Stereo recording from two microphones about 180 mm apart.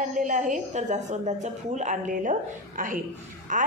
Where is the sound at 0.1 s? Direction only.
45° right (ahead or behind).